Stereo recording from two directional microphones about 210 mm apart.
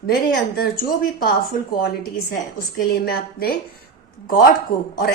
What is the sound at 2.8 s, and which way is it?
Speech, 45° left (ahead or behind).